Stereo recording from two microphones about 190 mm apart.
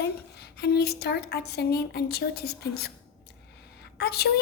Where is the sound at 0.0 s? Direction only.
55° left (ahead or behind).